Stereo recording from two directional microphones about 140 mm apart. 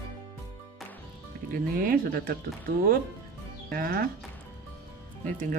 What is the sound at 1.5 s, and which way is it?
Speech, 90° right.